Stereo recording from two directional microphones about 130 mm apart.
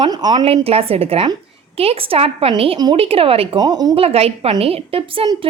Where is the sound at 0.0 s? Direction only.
35° right (ahead or behind).